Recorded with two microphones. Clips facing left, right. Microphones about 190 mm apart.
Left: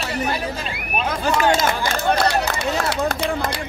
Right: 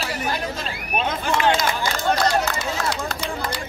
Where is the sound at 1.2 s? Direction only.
40° left (ahead or behind).